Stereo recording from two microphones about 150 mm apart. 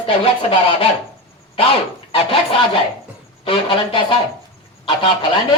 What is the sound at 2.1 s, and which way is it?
Speech, 35° left (ahead or behind).